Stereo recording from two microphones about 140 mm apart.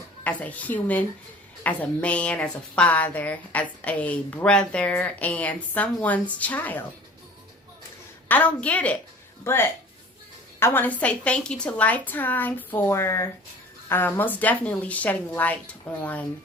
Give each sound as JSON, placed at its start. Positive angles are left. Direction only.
{"t": 0.3, "sound": "a woman's voice", "side_deg": 10}
{"t": 8.3, "sound": "a woman's voice", "side_deg": 10}